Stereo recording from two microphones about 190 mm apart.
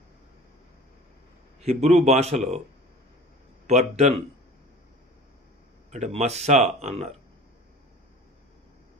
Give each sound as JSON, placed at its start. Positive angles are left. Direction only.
{"t": 1.6, "sound": "speech", "side_deg": -35}
{"t": 3.6, "sound": "speech", "side_deg": -35}
{"t": 5.9, "sound": "speech", "side_deg": -35}